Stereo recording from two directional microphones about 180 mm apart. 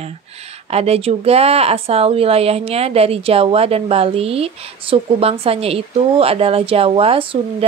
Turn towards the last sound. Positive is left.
turn(degrees=-30)  # may be behind; listen again after turning